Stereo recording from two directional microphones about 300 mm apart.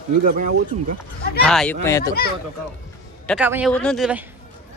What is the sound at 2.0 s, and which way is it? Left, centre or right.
Speech, left.